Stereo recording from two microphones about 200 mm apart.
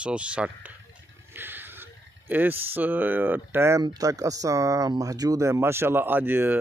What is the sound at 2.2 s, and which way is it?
Speech, 10° right (ahead or behind).